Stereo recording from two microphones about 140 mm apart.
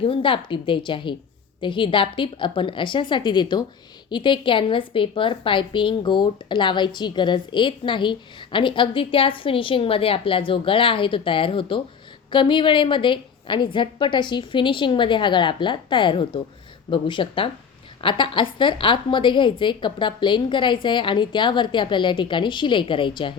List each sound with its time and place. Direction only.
0.0 s a woman's voice: 40° left (ahead or behind)